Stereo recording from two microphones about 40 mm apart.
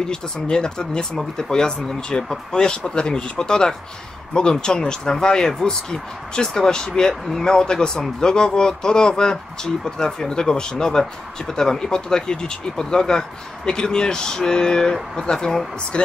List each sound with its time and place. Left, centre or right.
0.0 s speech: centre